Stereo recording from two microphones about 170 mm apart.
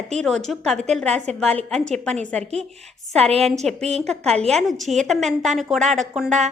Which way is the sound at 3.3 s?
35° right (ahead or behind).